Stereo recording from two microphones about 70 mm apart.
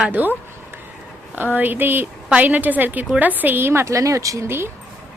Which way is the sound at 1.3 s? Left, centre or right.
Right.